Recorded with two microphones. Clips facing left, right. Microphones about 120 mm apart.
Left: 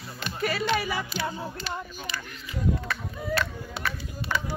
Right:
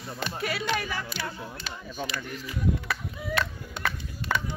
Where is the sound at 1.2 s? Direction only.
65° right (ahead or behind).